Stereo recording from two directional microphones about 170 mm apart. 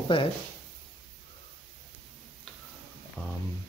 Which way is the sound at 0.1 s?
30° left (ahead or behind).